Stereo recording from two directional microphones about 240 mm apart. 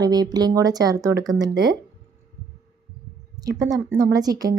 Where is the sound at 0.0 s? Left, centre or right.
Centre.